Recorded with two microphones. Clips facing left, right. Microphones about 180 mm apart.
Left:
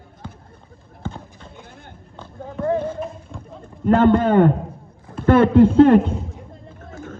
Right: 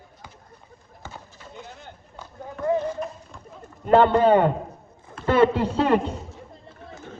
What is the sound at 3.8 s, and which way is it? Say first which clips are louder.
A man's voice: left 2 dB; 50° left (ahead or behind).